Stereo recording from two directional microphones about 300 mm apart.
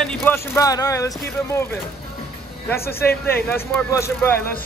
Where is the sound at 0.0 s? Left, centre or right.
Centre.